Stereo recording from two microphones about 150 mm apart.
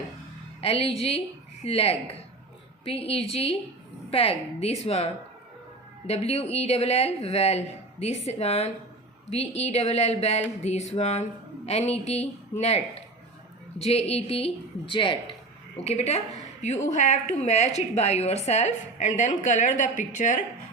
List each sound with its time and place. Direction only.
0.6 s a woman's voice: 40° left (ahead or behind)
15.8 s a woman's voice: 45° left (ahead or behind)